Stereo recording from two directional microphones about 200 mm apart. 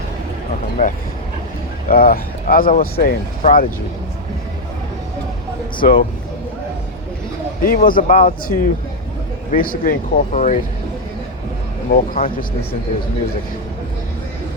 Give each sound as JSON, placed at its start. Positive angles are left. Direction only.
{"t": 1.9, "sound": "speech", "side_deg": 45}
{"t": 5.8, "sound": "speech", "side_deg": 45}
{"t": 7.6, "sound": "speech", "side_deg": 45}
{"t": 11.9, "sound": "speech", "side_deg": 45}